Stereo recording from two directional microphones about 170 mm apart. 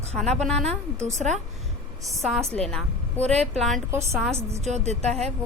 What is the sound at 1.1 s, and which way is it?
Speech, 45° right (ahead or behind).